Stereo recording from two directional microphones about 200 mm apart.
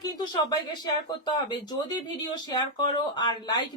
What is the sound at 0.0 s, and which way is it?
Speech, 20° left (ahead or behind).